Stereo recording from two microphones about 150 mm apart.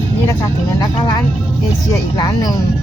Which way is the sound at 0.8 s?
25° left (ahead or behind).